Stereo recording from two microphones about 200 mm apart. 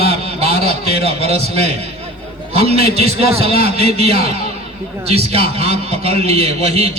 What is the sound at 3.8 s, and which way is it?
A man's voice, 30° right (ahead or behind).